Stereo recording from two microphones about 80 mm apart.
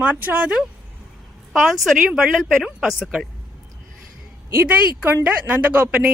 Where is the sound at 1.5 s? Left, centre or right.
Centre.